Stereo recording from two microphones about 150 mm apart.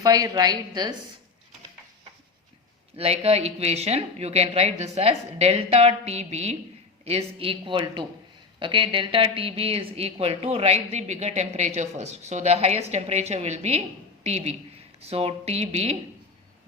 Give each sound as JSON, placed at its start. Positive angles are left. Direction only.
{"t": 0.0, "sound": "a woman's voice", "side_deg": -25}
{"t": 2.9, "sound": "a woman's voice", "side_deg": -40}